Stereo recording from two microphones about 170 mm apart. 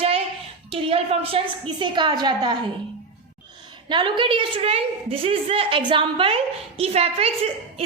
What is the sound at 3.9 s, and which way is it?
A woman's voice, 30° right (ahead or behind).